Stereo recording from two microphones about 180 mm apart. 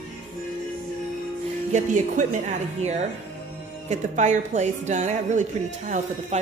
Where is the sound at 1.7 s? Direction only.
45° right (ahead or behind).